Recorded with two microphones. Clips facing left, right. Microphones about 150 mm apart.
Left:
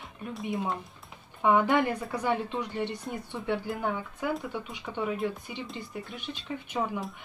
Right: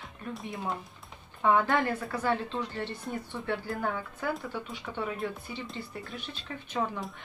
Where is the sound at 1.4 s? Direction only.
15° left (ahead or behind).